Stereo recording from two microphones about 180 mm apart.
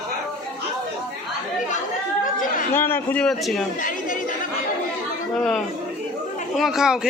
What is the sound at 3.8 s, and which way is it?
Chatter, 50° left (ahead or behind).